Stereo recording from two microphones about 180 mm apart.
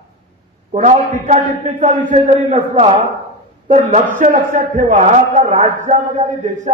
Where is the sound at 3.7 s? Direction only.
40° right (ahead or behind).